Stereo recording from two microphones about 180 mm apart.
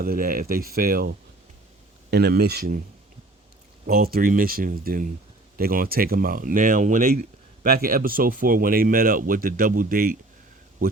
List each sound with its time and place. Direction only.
0.0 s speech: 55° right (ahead or behind)
3.8 s speech: 55° right (ahead or behind)